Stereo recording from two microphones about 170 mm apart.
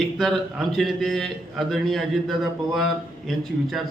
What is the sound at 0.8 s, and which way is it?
A man's voice, centre (ahead or behind).